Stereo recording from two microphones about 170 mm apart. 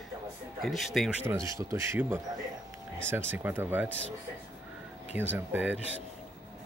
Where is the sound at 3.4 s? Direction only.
10° right (ahead or behind).